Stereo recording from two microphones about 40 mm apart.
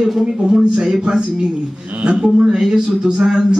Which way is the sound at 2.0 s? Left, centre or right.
Right.